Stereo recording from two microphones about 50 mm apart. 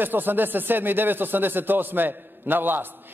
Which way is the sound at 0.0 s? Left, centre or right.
Right.